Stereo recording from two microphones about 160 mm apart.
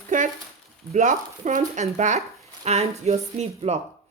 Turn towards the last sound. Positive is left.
turn(degrees=-40)  # may be behind; listen again after turning